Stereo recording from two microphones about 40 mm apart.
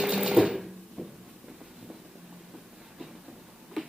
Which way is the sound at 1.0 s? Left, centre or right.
Right.